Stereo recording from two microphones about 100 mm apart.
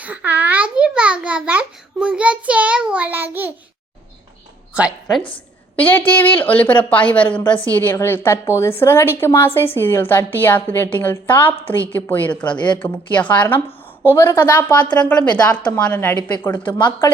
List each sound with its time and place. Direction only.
0.0 s a sound: 15° right (ahead or behind)
4.7 s a woman's voice: 10° right (ahead or behind)
5.7 s a woman's voice: 15° left (ahead or behind)
14.9 s a woman's voice: 10° left (ahead or behind)
16.6 s speech: 55° left (ahead or behind)